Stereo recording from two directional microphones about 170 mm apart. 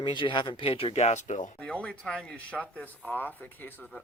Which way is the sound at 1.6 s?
5° left (ahead or behind).